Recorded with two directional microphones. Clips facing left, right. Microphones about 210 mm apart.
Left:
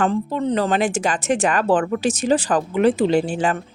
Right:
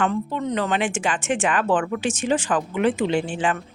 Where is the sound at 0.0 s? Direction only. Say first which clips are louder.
Left 3 dB; 35° left (ahead or behind).